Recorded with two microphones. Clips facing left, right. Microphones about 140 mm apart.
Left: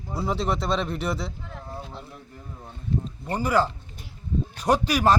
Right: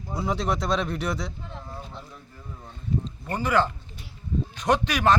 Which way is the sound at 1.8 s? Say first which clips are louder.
Left 2 dB; 5° left (ahead or behind).